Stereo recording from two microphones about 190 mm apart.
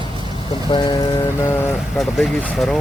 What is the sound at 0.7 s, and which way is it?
Speech, 25° left (ahead or behind).